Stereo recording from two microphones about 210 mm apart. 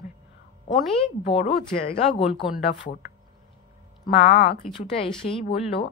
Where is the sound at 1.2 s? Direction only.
30° left (ahead or behind).